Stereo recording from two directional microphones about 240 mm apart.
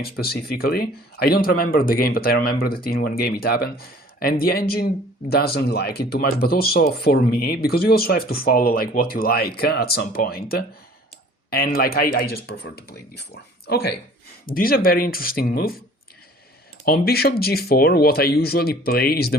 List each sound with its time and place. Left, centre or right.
0.0 s speech: left
16.8 s speech: left